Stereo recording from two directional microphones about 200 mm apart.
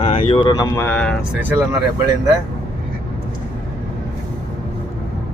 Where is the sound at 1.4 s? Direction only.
10° right (ahead or behind).